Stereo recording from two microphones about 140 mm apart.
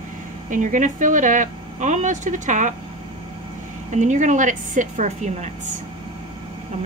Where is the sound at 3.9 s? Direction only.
60° right (ahead or behind).